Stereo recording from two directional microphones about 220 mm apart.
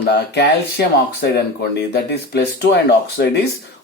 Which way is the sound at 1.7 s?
50° left (ahead or behind).